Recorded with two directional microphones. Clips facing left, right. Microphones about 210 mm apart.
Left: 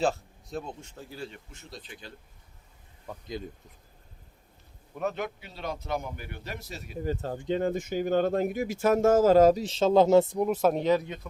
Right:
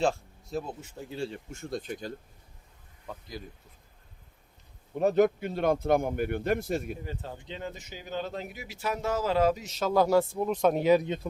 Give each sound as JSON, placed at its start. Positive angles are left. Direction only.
{"t": 0.0, "sound": "speech", "side_deg": 0}
{"t": 1.1, "sound": "speech", "side_deg": -25}
{"t": 1.5, "sound": "a man's voice", "side_deg": -50}
{"t": 4.9, "sound": "a man's voice", "side_deg": -40}
{"t": 7.0, "sound": "speech", "side_deg": 40}
{"t": 10.8, "sound": "speech", "side_deg": -15}